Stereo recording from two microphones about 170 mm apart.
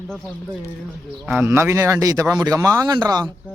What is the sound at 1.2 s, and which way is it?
Speech, 10° right (ahead or behind).